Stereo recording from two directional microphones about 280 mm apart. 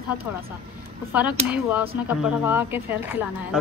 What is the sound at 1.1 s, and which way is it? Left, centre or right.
A woman's voice, centre.